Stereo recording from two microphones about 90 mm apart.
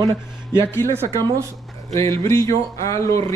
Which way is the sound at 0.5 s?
30° left (ahead or behind).